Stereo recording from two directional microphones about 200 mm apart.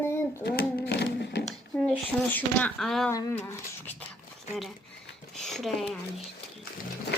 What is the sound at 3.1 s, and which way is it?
Speech, 15° left (ahead or behind).